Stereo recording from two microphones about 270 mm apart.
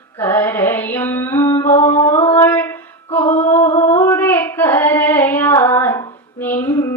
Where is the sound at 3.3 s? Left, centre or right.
Left.